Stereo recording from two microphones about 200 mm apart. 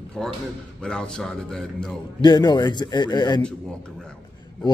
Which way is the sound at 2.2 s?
20° left (ahead or behind).